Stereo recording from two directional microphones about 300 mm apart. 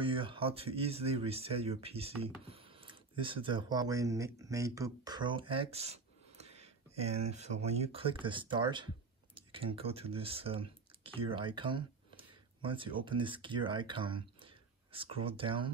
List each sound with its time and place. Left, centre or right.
0.0 s speech: centre